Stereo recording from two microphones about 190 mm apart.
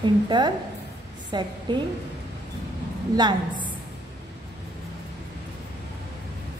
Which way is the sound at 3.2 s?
25° right (ahead or behind).